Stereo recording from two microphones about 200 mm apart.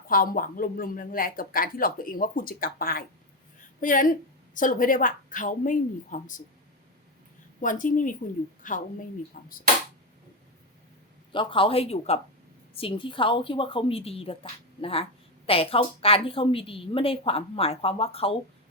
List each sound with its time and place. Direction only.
0.1 s a woman's voice: 45° left (ahead or behind)
7.6 s a woman's voice: 40° left (ahead or behind)
11.3 s a woman's voice: 25° left (ahead or behind)